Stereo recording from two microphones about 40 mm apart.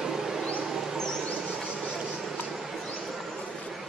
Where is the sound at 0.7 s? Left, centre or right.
Centre.